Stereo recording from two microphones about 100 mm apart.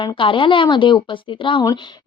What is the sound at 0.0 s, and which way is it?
A woman's voice, 55° left (ahead or behind).